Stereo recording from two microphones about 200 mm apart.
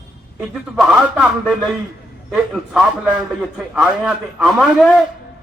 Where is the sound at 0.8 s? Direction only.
5° right (ahead or behind).